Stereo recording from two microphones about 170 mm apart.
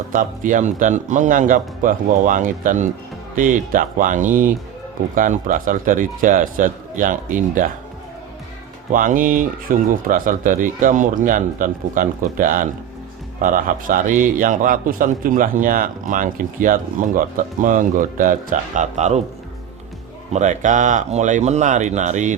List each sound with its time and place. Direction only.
0.1 s a man's voice: 50° right (ahead or behind)
8.9 s a man's voice: 50° right (ahead or behind)
20.3 s a man's voice: 45° right (ahead or behind)